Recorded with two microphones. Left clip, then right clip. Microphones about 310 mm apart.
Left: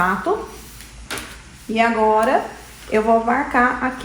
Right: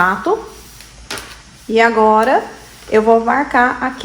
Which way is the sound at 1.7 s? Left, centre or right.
Right.